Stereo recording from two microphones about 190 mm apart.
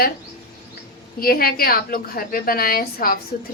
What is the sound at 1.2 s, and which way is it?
A woman's voice, 50° left (ahead or behind).